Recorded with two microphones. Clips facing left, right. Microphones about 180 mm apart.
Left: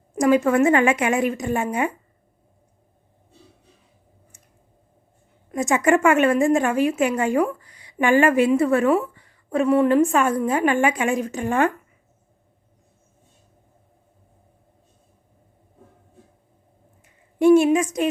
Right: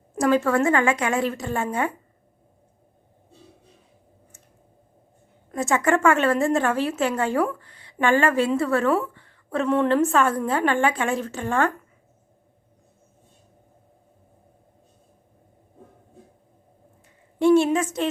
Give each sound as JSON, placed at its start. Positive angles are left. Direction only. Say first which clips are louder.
{"t": 0.2, "sound": "a woman's voice", "louder": "left 3 dB", "side_deg": 15}
{"t": 5.5, "sound": "a woman's voice", "louder": "left 3 dB", "side_deg": 15}
{"t": 17.4, "sound": "a woman's voice", "louder": "left 3 dB", "side_deg": 15}